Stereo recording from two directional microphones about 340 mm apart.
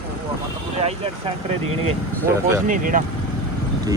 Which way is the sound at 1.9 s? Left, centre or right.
Centre.